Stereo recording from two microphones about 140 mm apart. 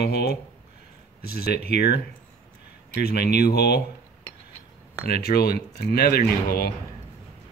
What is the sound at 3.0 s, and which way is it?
Speech, 90° left.